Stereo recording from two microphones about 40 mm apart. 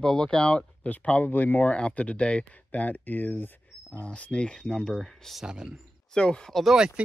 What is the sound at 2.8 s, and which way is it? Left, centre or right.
Speech, left.